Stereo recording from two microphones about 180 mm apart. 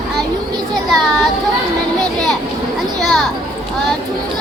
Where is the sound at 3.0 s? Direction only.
Centre (ahead or behind).